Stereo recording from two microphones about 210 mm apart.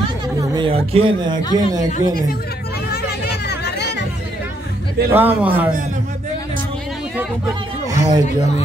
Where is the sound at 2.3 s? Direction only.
50° left (ahead or behind).